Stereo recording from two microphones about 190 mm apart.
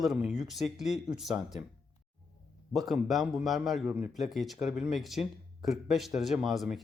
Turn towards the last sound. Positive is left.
turn(degrees=0)  # may be behind; listen again after turning